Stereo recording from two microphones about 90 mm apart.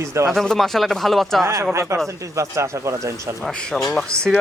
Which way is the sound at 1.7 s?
30° right (ahead or behind).